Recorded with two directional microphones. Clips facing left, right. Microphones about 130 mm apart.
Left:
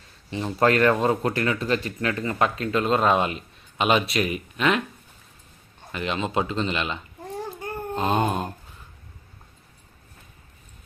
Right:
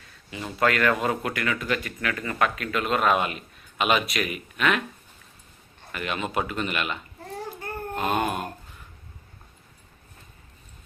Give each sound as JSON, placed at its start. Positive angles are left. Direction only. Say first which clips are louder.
{"t": 0.3, "sound": "speech", "louder": "left 4 dB", "side_deg": 30}
{"t": 5.9, "sound": "a child's voice", "louder": "left 3 dB", "side_deg": 25}